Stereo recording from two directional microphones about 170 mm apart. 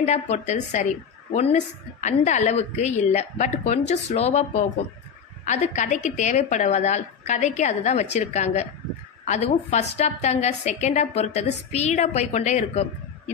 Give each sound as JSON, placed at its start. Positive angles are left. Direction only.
{"t": 0.0, "sound": "a woman's voice", "side_deg": 40}